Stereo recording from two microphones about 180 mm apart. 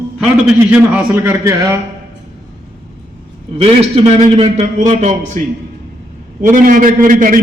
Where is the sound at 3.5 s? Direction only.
30° right (ahead or behind).